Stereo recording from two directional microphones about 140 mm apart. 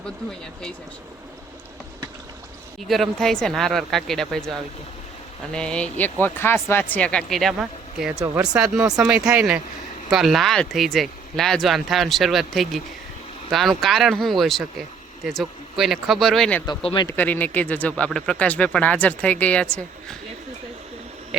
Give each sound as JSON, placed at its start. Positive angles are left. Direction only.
{"t": 2.8, "sound": "speech", "side_deg": 0}
{"t": 16.6, "sound": "speech", "side_deg": 35}
{"t": 17.1, "sound": "speech", "side_deg": 15}